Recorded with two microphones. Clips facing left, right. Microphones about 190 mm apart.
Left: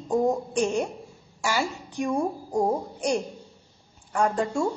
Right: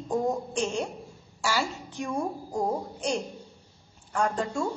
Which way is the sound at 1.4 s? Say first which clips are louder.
Left 2 dB; 15° left (ahead or behind).